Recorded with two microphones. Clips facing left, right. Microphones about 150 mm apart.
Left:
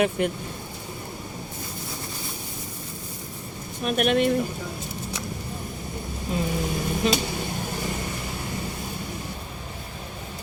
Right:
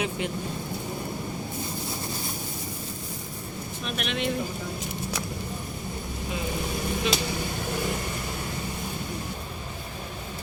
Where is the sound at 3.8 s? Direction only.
50° left (ahead or behind).